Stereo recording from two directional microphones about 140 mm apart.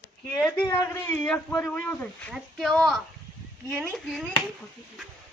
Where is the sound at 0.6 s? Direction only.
25° left (ahead or behind).